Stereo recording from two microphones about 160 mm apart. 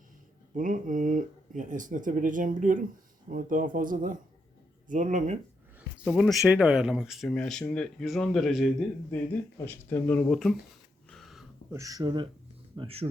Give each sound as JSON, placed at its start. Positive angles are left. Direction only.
{"t": 0.5, "sound": "speech", "side_deg": -55}
{"t": 6.1, "sound": "speech", "side_deg": -5}
{"t": 9.6, "sound": "speech", "side_deg": 10}
{"t": 11.1, "sound": "a sound", "side_deg": 0}
{"t": 11.7, "sound": "speech", "side_deg": -20}